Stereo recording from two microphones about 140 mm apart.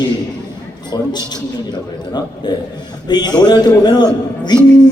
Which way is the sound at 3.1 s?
30° left (ahead or behind).